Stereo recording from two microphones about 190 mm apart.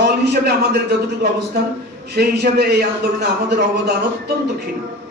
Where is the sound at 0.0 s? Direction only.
60° right (ahead or behind).